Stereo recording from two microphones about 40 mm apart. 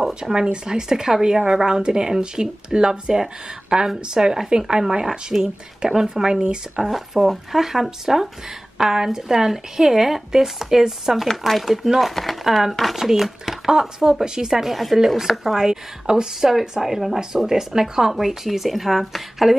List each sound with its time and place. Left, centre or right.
0.1 s speech: centre
6.9 s speech: centre
14.7 s speech: centre